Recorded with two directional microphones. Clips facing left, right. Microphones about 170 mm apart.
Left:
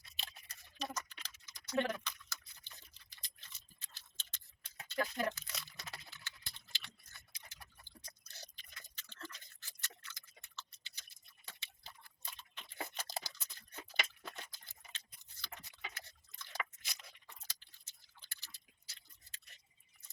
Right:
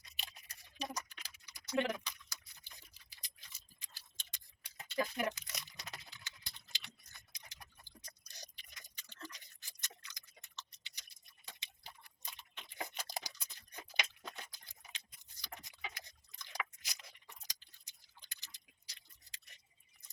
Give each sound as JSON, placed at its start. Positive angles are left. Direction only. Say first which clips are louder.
{"t": 0.0, "sound": "scissors", "louder": "left 1 dB", "side_deg": -15}
{"t": 0.8, "sound": "typing", "louder": "even", "side_deg": -15}
{"t": 2.6, "sound": "tick-tock", "louder": "even", "side_deg": -10}
{"t": 12.9, "sound": "a sound", "louder": "even", "side_deg": -15}
{"t": 14.3, "sound": "scissors", "louder": "even", "side_deg": -15}
{"t": 17.1, "sound": "a sound", "louder": "even", "side_deg": -15}